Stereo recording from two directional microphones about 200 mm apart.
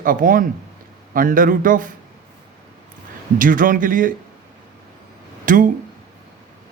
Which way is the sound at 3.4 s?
40° right (ahead or behind).